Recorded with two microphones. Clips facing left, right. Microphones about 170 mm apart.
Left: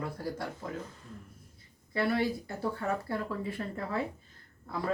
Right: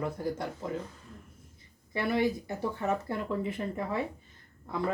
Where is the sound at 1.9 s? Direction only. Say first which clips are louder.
Right 1 dB; 15° right (ahead or behind).